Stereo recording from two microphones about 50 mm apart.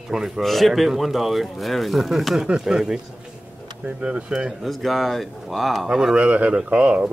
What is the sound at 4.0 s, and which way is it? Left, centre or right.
Speech, centre.